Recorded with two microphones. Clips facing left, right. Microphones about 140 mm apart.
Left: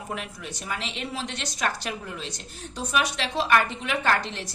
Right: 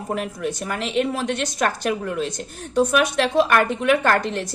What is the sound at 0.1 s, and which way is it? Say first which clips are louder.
A woman's voice: right 11 dB; 50° right (ahead or behind).